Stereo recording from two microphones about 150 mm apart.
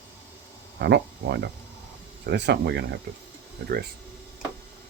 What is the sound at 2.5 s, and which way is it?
Speech, 90° right.